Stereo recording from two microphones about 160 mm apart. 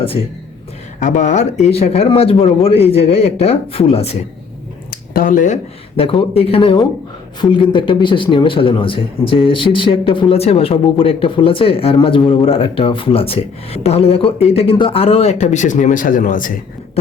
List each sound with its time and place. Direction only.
0.9 s speech: 50° left (ahead or behind)
4.9 s a sound: 60° left (ahead or behind)
6.0 s speech: 35° left (ahead or behind); by 16.6 s 55° left (ahead or behind)